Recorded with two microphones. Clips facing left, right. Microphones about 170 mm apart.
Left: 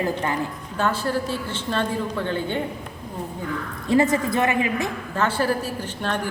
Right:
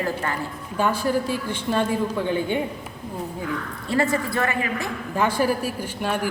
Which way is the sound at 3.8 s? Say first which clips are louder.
Left 4 dB; 20° left (ahead or behind).